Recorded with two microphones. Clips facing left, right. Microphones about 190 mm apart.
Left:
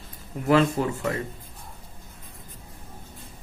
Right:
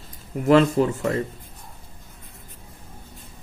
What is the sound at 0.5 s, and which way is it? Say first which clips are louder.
Speech: right 4 dB; 40° right (ahead or behind).